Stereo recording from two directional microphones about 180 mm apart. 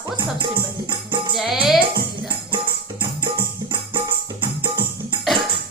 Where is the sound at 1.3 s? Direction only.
Centre (ahead or behind).